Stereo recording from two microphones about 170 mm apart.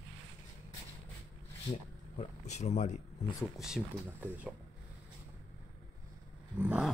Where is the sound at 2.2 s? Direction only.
45° left (ahead or behind).